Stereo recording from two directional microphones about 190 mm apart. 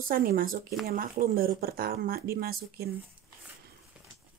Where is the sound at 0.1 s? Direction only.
50° right (ahead or behind).